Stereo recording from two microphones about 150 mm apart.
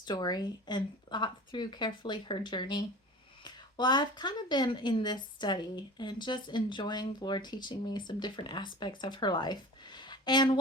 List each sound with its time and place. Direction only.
0.0 s speech: 30° left (ahead or behind)